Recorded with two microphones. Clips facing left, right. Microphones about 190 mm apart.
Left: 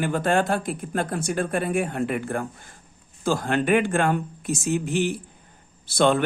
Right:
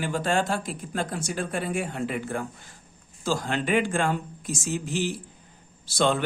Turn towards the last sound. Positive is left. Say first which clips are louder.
# left 4 dB
turn(degrees=55)  # may be behind; listen again after turning